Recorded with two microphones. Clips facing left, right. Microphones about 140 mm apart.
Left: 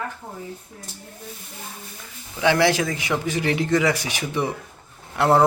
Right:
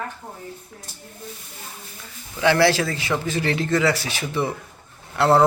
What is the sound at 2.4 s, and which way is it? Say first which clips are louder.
A man's voice: right 1 dB; 15° left (ahead or behind).